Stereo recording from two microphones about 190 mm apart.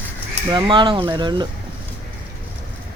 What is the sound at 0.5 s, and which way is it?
Speech, 25° right (ahead or behind).